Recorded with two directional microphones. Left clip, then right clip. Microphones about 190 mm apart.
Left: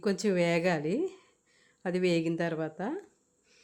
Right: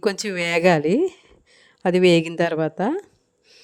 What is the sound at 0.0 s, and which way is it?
A woman's voice, 45° right (ahead or behind).